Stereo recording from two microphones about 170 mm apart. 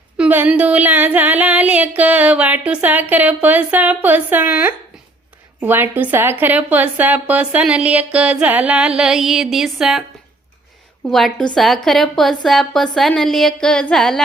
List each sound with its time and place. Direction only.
0.2 s a sound: 10° right (ahead or behind)
9.0 s a woman's voice: 5° right (ahead or behind)
11.0 s a woman's voice: centre (ahead or behind)